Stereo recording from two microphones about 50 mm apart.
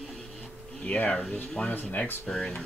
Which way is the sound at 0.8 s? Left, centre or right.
Left.